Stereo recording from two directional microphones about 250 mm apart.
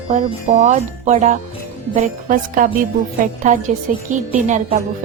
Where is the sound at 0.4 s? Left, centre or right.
Right.